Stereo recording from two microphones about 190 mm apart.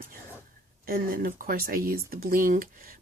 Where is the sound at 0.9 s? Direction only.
50° right (ahead or behind).